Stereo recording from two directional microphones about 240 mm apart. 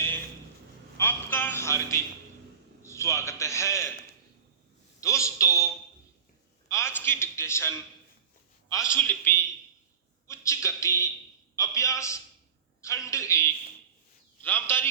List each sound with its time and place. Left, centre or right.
0.9 s a man's voice: centre
4.9 s a man's voice: centre
6.7 s a man's voice: centre
8.9 s a man's voice: centre